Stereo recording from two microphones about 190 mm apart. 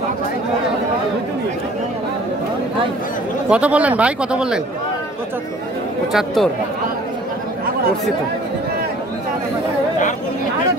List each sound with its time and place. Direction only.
3.4 s speech: 5° right (ahead or behind)
6.1 s speech: centre (ahead or behind)